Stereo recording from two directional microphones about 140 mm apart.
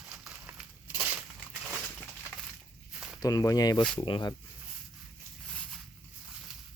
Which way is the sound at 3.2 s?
25° left (ahead or behind).